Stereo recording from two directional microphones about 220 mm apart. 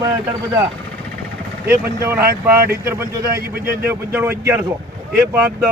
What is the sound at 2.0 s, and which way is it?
Speech, 10° right (ahead or behind).